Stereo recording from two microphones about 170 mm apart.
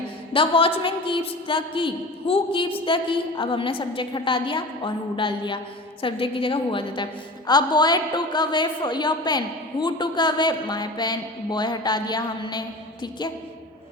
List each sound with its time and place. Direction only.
0.3 s a woman's voice: 30° left (ahead or behind)